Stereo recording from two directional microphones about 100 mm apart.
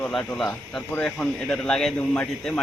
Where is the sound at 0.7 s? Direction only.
10° left (ahead or behind).